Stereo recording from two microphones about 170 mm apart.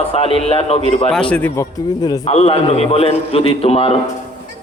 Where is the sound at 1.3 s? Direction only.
10° left (ahead or behind).